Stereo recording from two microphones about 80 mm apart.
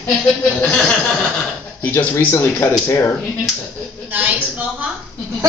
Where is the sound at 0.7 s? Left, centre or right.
Centre.